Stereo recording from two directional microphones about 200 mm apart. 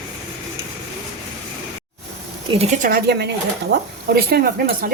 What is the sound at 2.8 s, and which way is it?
A woman's voice, 50° right (ahead or behind).